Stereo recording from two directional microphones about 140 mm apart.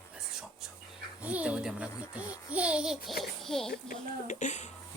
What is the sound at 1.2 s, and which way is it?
A child's voice, 10° right (ahead or behind).